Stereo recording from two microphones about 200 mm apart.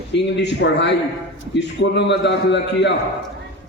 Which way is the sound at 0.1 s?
60° left (ahead or behind).